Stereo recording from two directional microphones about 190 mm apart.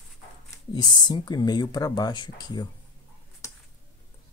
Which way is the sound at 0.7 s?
20° left (ahead or behind).